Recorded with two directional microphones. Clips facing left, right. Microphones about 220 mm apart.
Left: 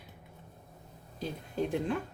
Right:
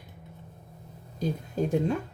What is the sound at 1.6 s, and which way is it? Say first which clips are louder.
Speech: right 5 dB; 40° right (ahead or behind).